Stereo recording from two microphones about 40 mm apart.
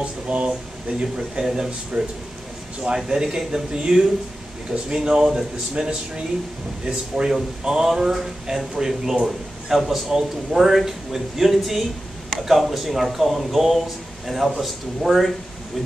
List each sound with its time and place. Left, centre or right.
0.0 s speech: right
3.1 s speech: centre
7.2 s speech: right; by 15.2 s centre